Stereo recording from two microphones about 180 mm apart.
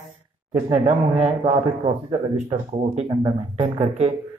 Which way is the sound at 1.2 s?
35° right (ahead or behind).